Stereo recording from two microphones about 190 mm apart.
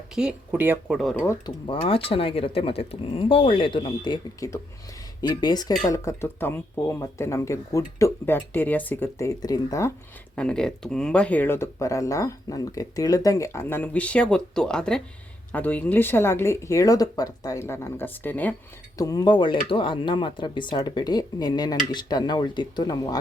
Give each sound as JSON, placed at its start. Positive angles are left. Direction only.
{"t": 0.1, "sound": "speech", "side_deg": -5}
{"t": 1.2, "sound": "speech", "side_deg": 20}
{"t": 10.3, "sound": "speech", "side_deg": 5}